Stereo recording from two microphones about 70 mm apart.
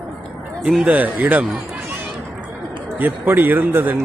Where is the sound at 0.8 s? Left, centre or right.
Right.